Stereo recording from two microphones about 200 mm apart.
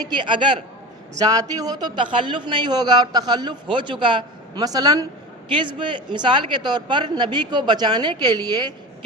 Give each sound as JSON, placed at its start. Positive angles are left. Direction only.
{"t": 0.0, "sound": "a man's voice", "side_deg": -20}